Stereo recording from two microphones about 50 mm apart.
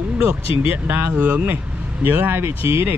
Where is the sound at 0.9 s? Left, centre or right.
Right.